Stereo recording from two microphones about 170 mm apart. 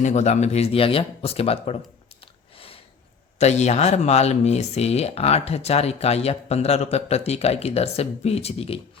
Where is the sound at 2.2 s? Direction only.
35° left (ahead or behind).